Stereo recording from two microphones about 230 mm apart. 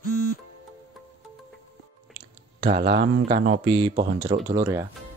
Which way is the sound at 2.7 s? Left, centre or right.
Right.